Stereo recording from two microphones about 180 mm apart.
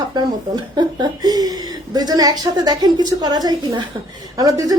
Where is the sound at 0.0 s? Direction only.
25° right (ahead or behind).